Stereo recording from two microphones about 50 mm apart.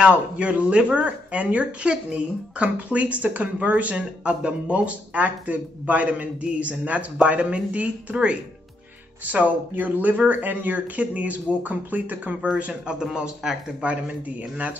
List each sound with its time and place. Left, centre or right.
0.1 s speech: right
13.0 s speech: centre
13.8 s speech: right